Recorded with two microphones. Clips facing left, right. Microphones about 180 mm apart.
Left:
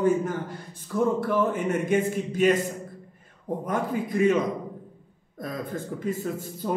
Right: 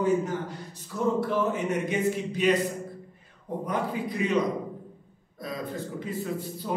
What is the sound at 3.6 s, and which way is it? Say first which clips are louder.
Speech: left 1 dB; 50° left (ahead or behind).